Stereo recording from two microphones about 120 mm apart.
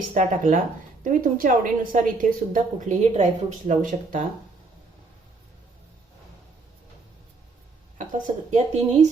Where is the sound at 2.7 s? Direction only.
80° right.